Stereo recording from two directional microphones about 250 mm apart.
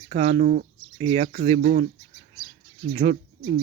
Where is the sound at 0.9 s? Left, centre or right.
Right.